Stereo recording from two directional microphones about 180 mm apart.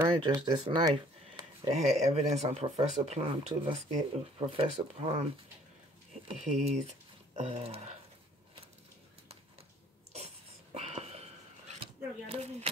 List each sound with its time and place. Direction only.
0.0 s speech: 25° right (ahead or behind)
1.6 s speech: 40° right (ahead or behind)
6.2 s speech: 40° right (ahead or behind)
10.7 s a sound: 35° right (ahead or behind)